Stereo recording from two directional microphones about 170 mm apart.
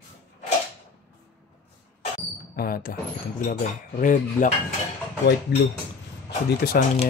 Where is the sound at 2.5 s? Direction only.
60° left (ahead or behind).